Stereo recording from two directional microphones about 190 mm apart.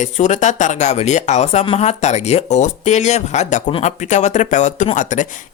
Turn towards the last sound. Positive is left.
turn(degrees=40)  # may be behind; listen again after turning